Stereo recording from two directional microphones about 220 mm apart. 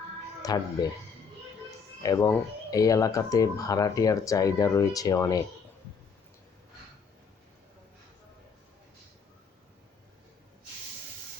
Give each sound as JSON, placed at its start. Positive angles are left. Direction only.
{"t": 0.4, "sound": "speech", "side_deg": 15}
{"t": 2.0, "sound": "speech", "side_deg": 15}